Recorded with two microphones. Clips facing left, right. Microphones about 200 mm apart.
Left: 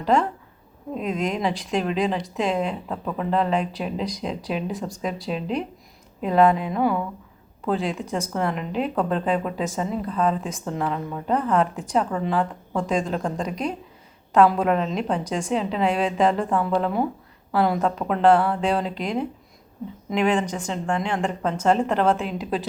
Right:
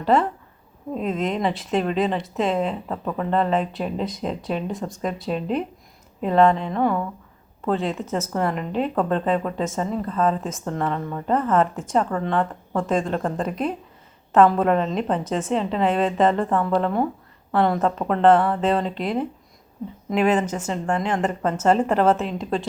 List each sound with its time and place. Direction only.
0.0 s speech: 5° right (ahead or behind)